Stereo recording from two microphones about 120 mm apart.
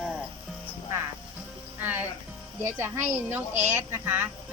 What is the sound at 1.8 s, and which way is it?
Speech, 15° right (ahead or behind).